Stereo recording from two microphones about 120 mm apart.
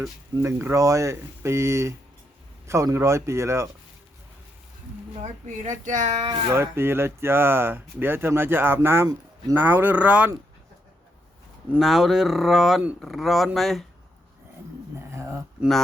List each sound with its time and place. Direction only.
0.4 s speech: 25° right (ahead or behind)
5.2 s speech: 90° right
6.5 s speech: 20° right (ahead or behind)
11.8 s speech: centre (ahead or behind)